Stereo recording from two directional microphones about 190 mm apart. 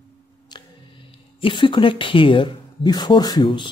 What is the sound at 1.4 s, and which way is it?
Speech, 25° left (ahead or behind).